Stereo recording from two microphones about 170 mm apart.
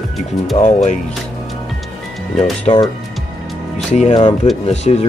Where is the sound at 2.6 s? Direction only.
25° left (ahead or behind).